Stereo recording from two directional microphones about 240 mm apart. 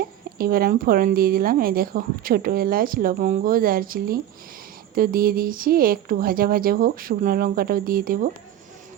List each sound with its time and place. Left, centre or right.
0.3 s a woman's voice: right